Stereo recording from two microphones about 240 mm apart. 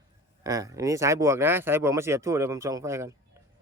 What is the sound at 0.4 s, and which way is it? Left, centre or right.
Speech, centre.